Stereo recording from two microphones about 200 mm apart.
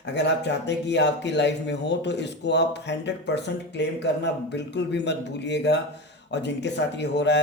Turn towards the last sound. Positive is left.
turn(degrees=60)  # may be behind; listen again after turning